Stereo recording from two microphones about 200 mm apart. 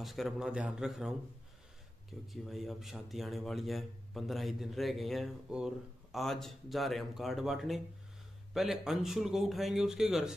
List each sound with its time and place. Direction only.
0.0 s a man's voice: centre (ahead or behind)
2.3 s a man's voice: centre (ahead or behind)